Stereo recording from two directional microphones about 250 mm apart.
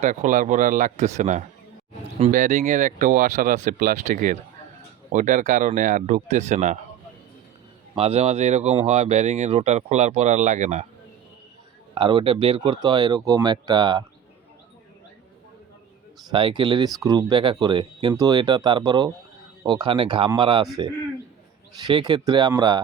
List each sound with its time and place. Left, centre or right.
0.0 s speech: right
7.9 s speech: right
11.9 s speech: right
16.3 s speech: centre
21.8 s speech: centre